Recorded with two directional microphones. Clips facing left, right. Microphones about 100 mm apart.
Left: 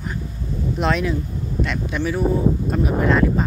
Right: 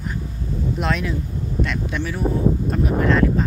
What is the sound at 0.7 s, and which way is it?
Speech, centre (ahead or behind).